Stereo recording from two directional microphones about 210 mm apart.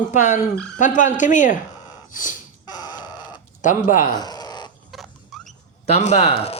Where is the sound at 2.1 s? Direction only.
40° left (ahead or behind).